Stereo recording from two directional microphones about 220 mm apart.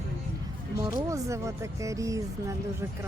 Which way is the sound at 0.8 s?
15° right (ahead or behind).